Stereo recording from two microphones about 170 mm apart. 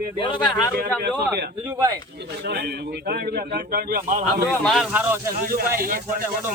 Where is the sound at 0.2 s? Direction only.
30° left (ahead or behind).